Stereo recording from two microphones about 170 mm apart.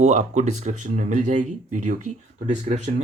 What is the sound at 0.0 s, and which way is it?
Speech, 45° right (ahead or behind).